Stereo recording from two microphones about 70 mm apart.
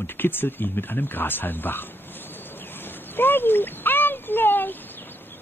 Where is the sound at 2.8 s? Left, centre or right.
Left.